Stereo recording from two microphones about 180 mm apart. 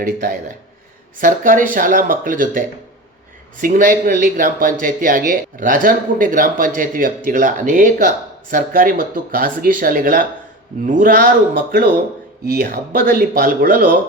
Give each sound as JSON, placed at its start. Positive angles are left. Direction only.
{"t": 1.2, "sound": "speech", "side_deg": -50}